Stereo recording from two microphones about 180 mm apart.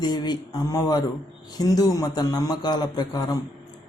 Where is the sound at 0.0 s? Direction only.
25° left (ahead or behind).